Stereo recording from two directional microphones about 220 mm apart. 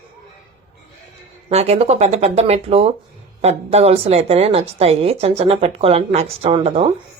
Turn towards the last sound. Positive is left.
turn(degrees=-25)  # may be behind; listen again after turning